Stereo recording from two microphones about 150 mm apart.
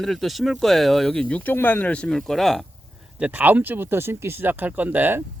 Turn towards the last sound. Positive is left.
turn(degrees=-10)  # may be behind; listen again after turning